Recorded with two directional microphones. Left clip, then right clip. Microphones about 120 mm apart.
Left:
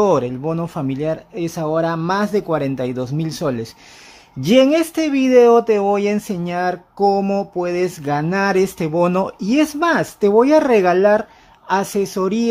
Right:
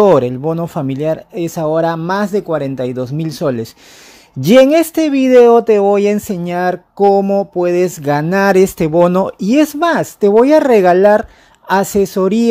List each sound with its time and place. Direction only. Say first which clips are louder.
0.0 s speech: right 6 dB; 45° right (ahead or behind)
4.4 s speech: right 6 dB; 50° right (ahead or behind)